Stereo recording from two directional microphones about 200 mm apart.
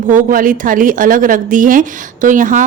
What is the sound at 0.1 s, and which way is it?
A woman's voice, 45° right (ahead or behind).